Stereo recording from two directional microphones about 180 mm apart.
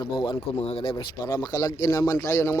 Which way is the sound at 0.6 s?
30° left (ahead or behind).